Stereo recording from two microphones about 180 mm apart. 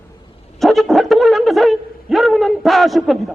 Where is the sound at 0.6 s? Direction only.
Centre (ahead or behind).